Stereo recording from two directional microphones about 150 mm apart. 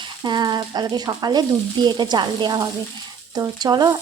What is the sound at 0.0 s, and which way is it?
Speech, 30° right (ahead or behind).